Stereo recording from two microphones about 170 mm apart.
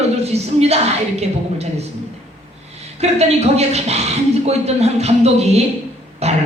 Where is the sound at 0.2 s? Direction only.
40° right (ahead or behind).